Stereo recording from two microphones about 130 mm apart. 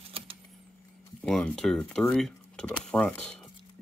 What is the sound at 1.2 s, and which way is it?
Speech, 5° left (ahead or behind).